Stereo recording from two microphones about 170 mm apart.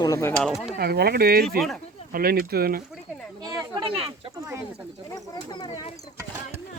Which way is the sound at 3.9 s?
35° right (ahead or behind).